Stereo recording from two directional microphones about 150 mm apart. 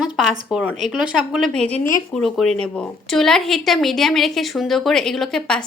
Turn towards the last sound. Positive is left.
turn(degrees=5)  # may be behind; listen again after turning